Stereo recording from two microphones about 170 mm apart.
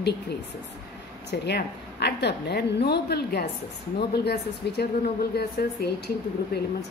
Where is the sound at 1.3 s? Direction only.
75° left (ahead or behind).